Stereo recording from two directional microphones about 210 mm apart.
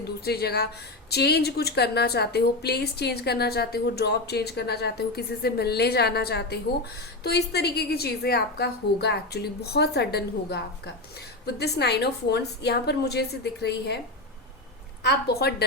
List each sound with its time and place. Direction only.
0.3 s a woman's voice: 50° left (ahead or behind)
15.0 s a woman's voice: 50° left (ahead or behind)